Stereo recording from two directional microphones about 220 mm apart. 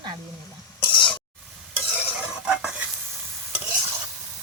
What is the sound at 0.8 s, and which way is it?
Stir, 20° left (ahead or behind).